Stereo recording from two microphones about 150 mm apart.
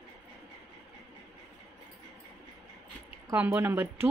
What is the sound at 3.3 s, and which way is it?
Speech, 15° right (ahead or behind).